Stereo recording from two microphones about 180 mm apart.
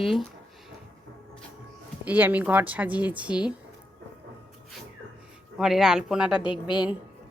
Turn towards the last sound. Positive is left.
turn(degrees=25)  # may be behind; listen again after turning